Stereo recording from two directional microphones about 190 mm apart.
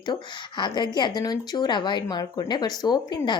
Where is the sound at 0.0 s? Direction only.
25° left (ahead or behind).